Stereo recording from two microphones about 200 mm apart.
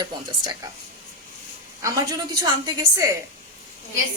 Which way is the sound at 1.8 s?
15° right (ahead or behind).